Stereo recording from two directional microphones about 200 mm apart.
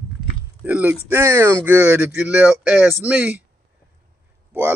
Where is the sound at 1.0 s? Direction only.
10° right (ahead or behind).